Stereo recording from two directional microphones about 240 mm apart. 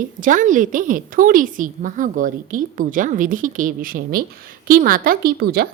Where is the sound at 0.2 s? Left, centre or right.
Right.